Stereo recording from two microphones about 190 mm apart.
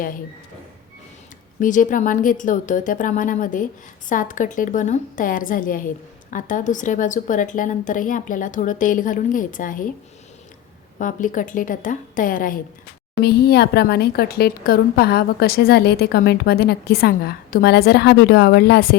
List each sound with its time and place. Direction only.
1.5 s a woman's voice: 45° left (ahead or behind)
10.9 s a woman's voice: 45° left (ahead or behind)
13.2 s a woman's voice: 55° left (ahead or behind)